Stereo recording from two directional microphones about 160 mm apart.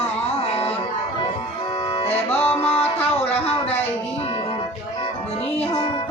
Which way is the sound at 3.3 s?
40° left (ahead or behind).